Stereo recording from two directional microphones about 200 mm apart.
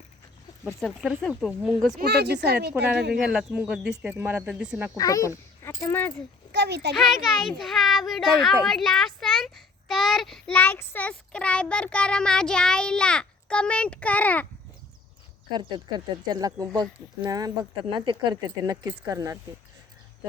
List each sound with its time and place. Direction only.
0.8 s a child's voice: centre (ahead or behind)
2.0 s a woman's voice: 55° right (ahead or behind)
3.2 s a child's voice: 5° right (ahead or behind)
4.9 s speech: 15° left (ahead or behind)
6.5 s a child's voice: 55° right (ahead or behind)
6.9 s a child's voice: centre (ahead or behind)
16.2 s a woman's voice: 20° right (ahead or behind)